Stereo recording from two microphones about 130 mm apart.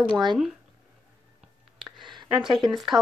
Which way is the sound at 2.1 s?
35° right (ahead or behind).